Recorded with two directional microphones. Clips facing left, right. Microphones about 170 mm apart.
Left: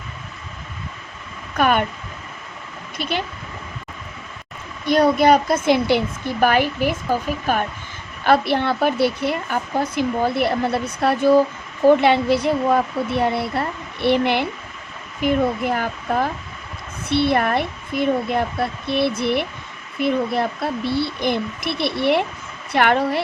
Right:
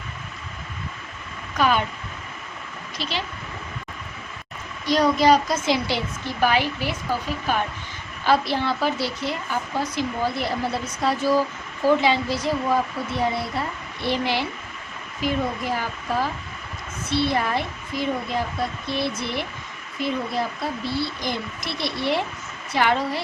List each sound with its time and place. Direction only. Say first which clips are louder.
1.5 s speech: left 3 dB; 55° left (ahead or behind)
3.0 s speech: left 5 dB; 55° left (ahead or behind)
4.9 s speech: left 3 dB; 55° left (ahead or behind)
8.2 s speech: left 4 dB; 60° left (ahead or behind)